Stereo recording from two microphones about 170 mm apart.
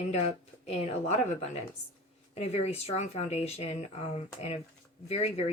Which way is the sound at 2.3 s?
40° left (ahead or behind).